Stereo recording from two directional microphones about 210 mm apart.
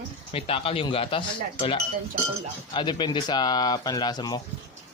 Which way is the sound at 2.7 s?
20° left (ahead or behind).